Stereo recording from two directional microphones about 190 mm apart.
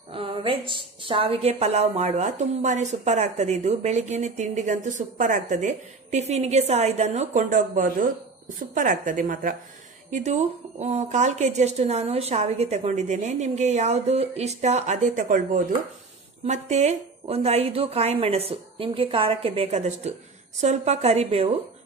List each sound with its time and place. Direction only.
0.1 s a woman's voice: 25° right (ahead or behind)